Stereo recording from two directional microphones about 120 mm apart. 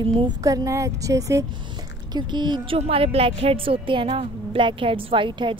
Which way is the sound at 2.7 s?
55° right (ahead or behind).